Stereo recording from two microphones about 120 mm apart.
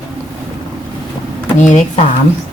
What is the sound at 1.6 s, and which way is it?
Speech, 80° left.